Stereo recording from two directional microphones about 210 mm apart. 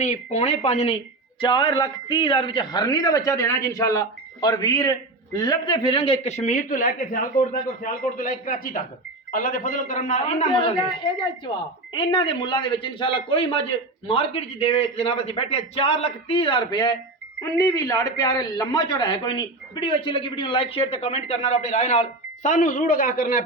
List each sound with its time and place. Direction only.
0.0 s a man's voice: 35° left (ahead or behind)
10.5 s a man's voice: 25° left (ahead or behind); by 23.4 s 40° left (ahead or behind)